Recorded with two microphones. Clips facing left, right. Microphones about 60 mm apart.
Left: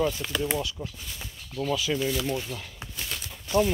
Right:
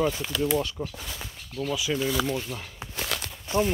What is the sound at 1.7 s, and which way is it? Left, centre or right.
Speech, centre.